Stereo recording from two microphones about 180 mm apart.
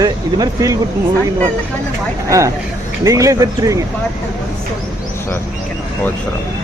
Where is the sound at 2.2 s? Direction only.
15° right (ahead or behind).